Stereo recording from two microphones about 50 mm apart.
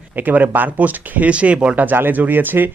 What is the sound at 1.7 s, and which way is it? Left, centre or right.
Speech, right.